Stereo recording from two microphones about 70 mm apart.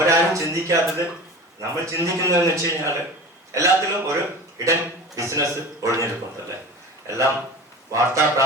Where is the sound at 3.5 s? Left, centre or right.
Right.